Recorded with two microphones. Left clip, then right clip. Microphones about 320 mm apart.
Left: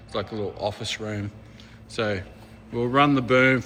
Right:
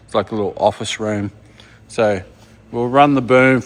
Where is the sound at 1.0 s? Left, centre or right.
Centre.